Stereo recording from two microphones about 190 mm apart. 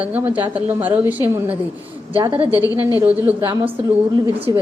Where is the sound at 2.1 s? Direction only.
30° right (ahead or behind).